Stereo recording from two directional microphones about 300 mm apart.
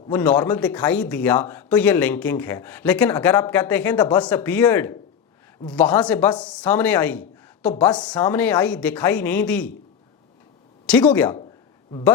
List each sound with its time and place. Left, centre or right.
0.1 s a man's voice: centre
10.8 s a man's voice: centre
11.9 s speech: centre